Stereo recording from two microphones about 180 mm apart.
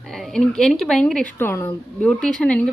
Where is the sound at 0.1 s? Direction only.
Centre (ahead or behind).